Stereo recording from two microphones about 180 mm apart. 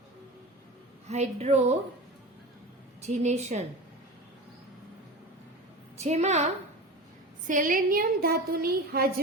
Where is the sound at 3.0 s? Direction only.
40° right (ahead or behind).